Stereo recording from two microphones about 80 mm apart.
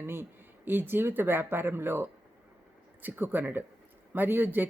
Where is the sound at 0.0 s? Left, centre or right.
Right.